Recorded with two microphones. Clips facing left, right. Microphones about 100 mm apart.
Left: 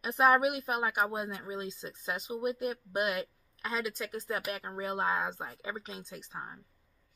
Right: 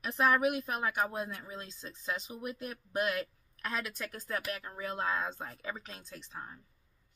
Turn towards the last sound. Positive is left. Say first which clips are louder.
# left 4 dB
turn(degrees=5)  # may be behind; listen again after turning